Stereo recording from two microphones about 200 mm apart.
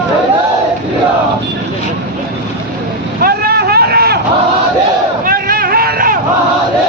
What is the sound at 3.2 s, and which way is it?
Vehicle, 50° right (ahead or behind).